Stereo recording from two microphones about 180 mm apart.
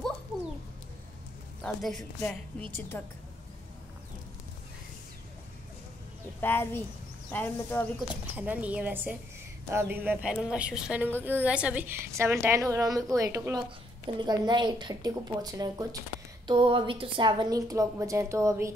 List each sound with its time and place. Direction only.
1.6 s speech: centre (ahead or behind)
2.9 s speech: 15° left (ahead or behind)
6.4 s speech: 10° left (ahead or behind)
8.1 s a woman's voice: 10° right (ahead or behind)